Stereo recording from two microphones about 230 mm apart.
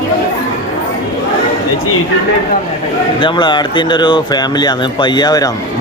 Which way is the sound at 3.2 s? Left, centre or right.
Left.